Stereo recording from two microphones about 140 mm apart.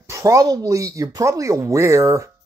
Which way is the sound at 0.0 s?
20° right (ahead or behind).